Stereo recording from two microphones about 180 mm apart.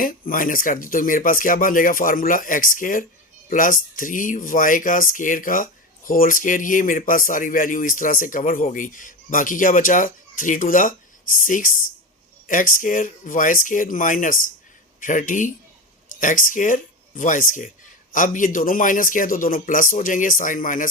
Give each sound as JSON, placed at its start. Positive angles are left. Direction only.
{"t": 0.0, "sound": "speech", "side_deg": 50}